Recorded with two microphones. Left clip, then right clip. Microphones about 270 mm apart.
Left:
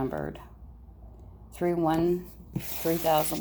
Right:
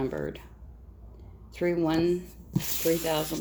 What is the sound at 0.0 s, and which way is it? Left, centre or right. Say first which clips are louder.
Speech: right 1 dB; left.